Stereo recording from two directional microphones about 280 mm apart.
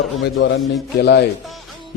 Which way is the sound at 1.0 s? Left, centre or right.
Left.